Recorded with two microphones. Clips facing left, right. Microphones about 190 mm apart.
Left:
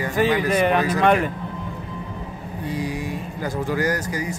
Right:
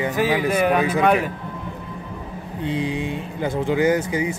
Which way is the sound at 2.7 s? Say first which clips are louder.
Right 3 dB; 25° right (ahead or behind).